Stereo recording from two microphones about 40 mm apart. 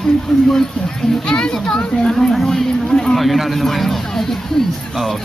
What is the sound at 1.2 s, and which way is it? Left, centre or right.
Speech, centre.